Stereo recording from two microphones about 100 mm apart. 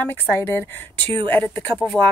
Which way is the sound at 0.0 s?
20° left (ahead or behind).